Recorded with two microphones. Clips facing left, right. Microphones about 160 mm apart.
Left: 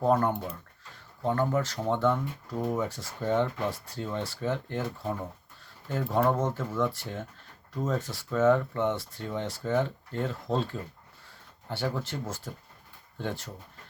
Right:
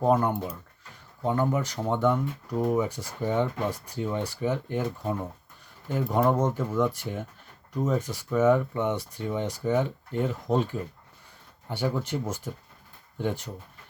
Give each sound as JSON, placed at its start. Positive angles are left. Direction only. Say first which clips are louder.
{"t": 0.0, "sound": "speech", "louder": "right 2 dB", "side_deg": -15}